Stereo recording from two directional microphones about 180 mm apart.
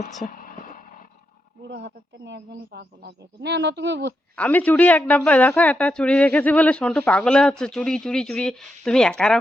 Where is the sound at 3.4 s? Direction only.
70° right (ahead or behind).